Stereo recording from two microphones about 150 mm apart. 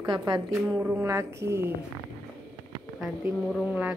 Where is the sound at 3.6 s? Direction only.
10° right (ahead or behind).